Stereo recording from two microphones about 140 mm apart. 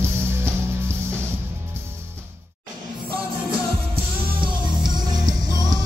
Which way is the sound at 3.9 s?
40° right (ahead or behind).